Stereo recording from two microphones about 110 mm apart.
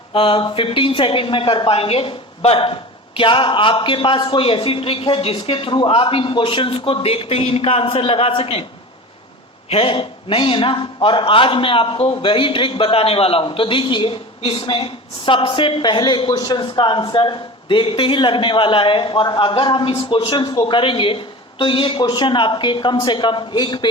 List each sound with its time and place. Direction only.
0.1 s a man's voice: 55° left (ahead or behind)
9.6 s a man's voice: 60° left (ahead or behind)